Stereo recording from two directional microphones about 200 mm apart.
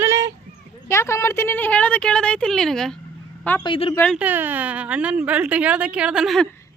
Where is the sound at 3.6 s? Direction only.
25° left (ahead or behind).